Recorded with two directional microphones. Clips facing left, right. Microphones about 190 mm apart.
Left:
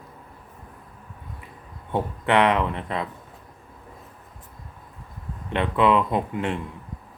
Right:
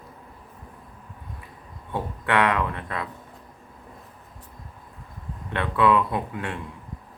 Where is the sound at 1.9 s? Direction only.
20° left (ahead or behind).